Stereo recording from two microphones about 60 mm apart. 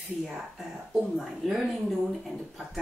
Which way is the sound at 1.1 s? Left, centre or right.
Centre.